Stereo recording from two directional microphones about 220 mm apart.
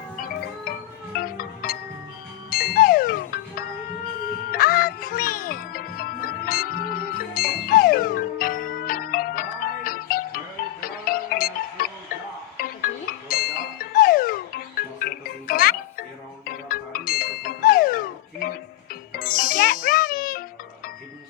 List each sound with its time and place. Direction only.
0.2 s music: 40° left (ahead or behind)
19.1 s ding: 40° left (ahead or behind)